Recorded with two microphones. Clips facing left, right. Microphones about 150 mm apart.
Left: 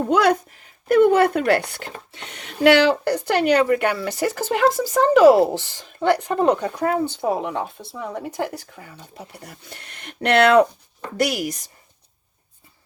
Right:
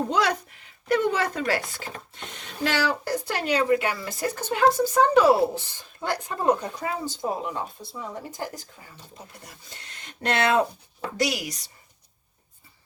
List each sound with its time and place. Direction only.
0.1 s speech: 55° left (ahead or behind)
11.2 s a woman's voice: 50° left (ahead or behind)